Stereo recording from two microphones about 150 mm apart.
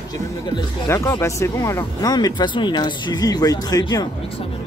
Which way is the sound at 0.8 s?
20° left (ahead or behind).